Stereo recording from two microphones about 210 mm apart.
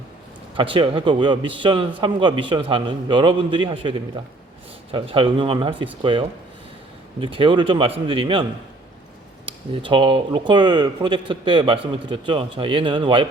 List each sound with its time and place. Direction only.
0.5 s speech: 25° right (ahead or behind)
9.5 s speech: 25° right (ahead or behind)